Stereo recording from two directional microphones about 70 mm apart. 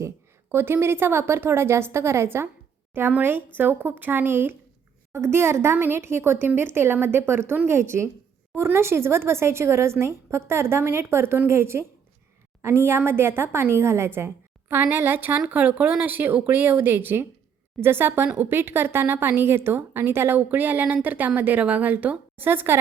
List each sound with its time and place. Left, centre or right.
0.5 s a woman's voice: right